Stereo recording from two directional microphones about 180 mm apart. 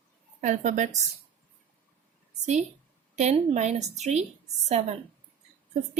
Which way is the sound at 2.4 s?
40° right (ahead or behind).